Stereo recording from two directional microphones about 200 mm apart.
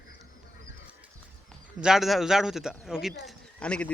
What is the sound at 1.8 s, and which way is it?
A man's voice, centre (ahead or behind).